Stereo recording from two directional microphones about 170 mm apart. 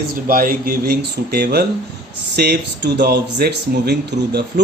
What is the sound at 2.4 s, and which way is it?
Speech, 80° right.